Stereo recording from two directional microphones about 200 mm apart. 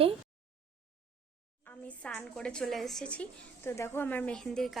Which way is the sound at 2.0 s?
5° left (ahead or behind).